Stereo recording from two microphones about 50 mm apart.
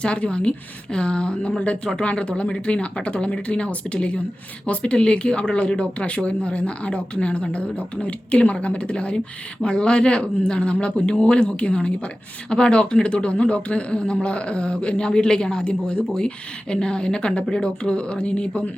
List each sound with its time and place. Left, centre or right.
0.0 s speech: left